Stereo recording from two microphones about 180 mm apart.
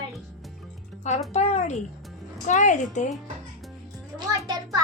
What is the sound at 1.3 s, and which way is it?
A child's voice, 40° left (ahead or behind).